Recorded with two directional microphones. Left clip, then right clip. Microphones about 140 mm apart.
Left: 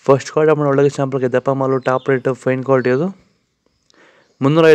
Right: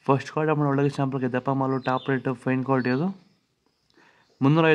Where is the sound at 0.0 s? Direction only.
30° left (ahead or behind).